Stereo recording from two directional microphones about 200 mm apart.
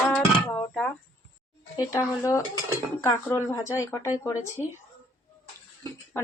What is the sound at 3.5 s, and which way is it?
A woman's voice, 15° left (ahead or behind).